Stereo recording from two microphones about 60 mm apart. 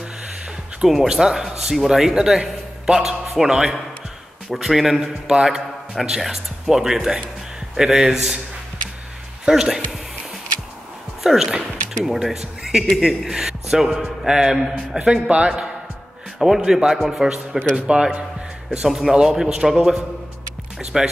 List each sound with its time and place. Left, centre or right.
0.8 s a man's voice: centre
9.5 s a man's voice: centre
11.2 s a man's voice: centre
17.7 s a man's voice: centre
18.9 s a man's voice: centre